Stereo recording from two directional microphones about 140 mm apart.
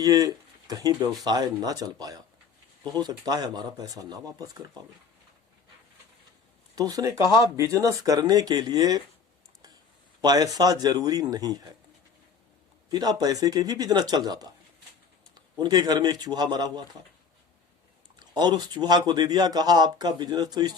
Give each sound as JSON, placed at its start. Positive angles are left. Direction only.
{"t": 0.0, "sound": "speech", "side_deg": -25}
{"t": 6.7, "sound": "speech", "side_deg": -25}
{"t": 10.2, "sound": "speech", "side_deg": -30}
{"t": 12.9, "sound": "speech", "side_deg": -30}
{"t": 18.2, "sound": "speech", "side_deg": -30}